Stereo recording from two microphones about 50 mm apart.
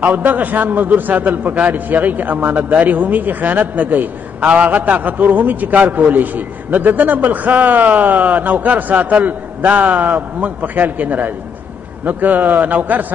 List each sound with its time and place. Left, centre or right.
0.0 s a man's voice: right
4.4 s a man's voice: right